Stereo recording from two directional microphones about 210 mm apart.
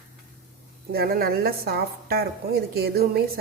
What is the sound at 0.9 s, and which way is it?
A woman's voice, 45° right (ahead or behind).